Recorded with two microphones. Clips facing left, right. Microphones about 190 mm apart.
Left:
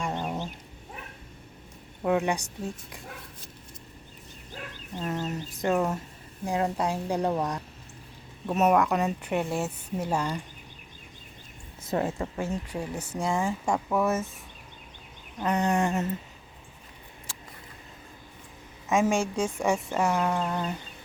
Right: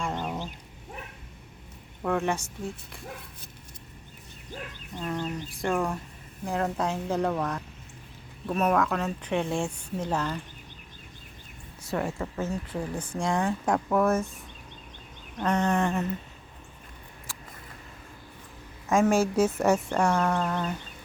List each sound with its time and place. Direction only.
0.0 s a sound: 15° left (ahead or behind)
2.0 s speech: 15° left (ahead or behind)
4.9 s speech: 25° left (ahead or behind)
11.9 s speech: 20° left (ahead or behind); by 14.3 s 5° left (ahead or behind)
15.4 s speech: 5° left (ahead or behind)
15.6 s speech: 20° left (ahead or behind)
18.9 s a woman's voice: centre (ahead or behind)
20.1 s speech: 15° left (ahead or behind)